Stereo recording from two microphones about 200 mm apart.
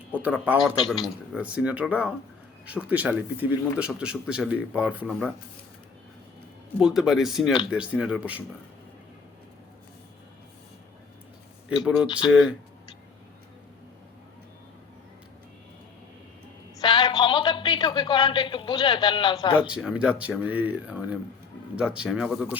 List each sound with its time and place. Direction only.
0.1 s a man's voice: 10° right (ahead or behind)
6.7 s speech: 5° right (ahead or behind)
11.7 s speech: centre (ahead or behind)
16.8 s a sound: 20° left (ahead or behind)
19.6 s a man's voice: 5° right (ahead or behind)